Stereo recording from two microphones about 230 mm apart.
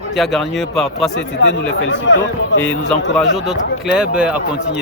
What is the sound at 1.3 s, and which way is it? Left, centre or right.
Speech, left.